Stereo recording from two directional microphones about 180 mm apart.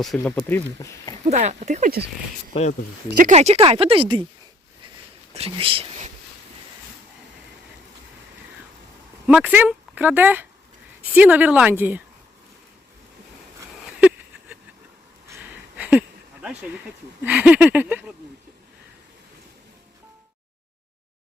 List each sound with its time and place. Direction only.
0.2 s speech: 10° left (ahead or behind)
1.2 s speech: 40° right (ahead or behind)
2.5 s speech: 35° left (ahead or behind)
3.2 s speech: 40° right (ahead or behind)
5.3 s speech: 30° right (ahead or behind)
9.2 s speech: 10° right (ahead or behind)
15.3 s a sound: 10° right (ahead or behind)
17.2 s speech: 5° right (ahead or behind)